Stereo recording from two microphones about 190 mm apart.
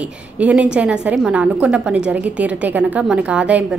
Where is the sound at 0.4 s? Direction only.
5° right (ahead or behind).